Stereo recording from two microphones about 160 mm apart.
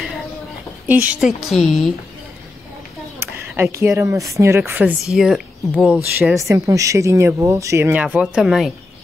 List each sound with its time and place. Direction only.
0.8 s a woman's voice: 10° right (ahead or behind)
3.2 s speech: 15° right (ahead or behind)
6.1 s speech: 15° right (ahead or behind)